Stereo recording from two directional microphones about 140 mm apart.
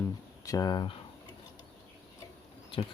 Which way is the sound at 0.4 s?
30° left (ahead or behind).